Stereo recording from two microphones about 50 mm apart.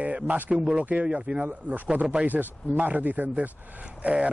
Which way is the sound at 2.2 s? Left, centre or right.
Right.